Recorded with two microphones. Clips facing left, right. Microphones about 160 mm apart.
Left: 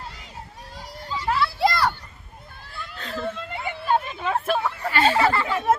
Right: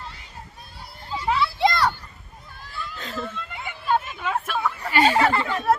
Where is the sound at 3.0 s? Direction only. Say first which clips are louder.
Left 1 dB; centre (ahead or behind).